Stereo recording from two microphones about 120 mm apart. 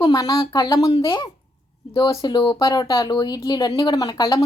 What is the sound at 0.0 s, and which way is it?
A woman's voice, 30° left (ahead or behind).